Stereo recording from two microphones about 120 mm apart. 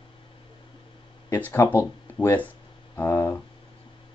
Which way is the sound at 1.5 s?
20° left (ahead or behind).